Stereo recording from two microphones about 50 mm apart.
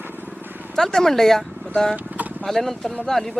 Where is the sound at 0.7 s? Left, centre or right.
Centre.